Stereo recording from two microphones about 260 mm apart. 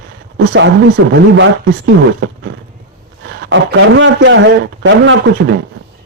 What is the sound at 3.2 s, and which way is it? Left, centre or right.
A man's voice, right.